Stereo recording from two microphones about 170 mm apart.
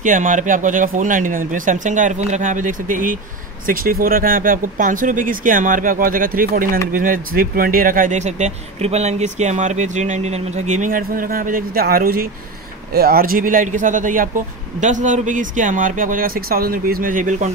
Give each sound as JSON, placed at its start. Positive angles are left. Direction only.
{"t": 0.0, "sound": "speech", "side_deg": -50}